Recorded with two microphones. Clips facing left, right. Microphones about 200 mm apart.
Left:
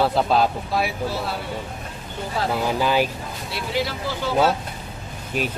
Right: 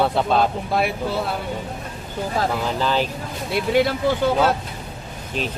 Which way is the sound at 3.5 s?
55° right (ahead or behind).